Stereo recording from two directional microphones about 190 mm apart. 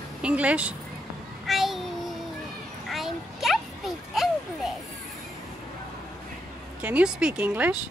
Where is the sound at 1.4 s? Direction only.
Centre (ahead or behind).